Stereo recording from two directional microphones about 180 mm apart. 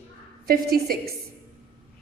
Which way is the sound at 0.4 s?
60° right (ahead or behind).